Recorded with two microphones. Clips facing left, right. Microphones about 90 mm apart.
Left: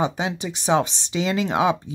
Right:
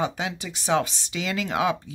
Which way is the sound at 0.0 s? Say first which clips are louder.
Left 4 dB; 20° left (ahead or behind).